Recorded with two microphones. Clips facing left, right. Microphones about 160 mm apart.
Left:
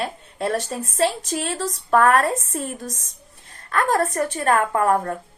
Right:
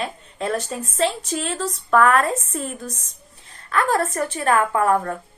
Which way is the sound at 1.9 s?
40° left (ahead or behind).